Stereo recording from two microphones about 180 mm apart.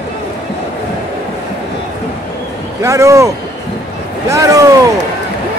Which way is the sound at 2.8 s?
15° right (ahead or behind).